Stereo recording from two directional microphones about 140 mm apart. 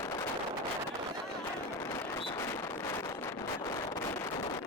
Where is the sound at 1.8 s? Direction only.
20° left (ahead or behind).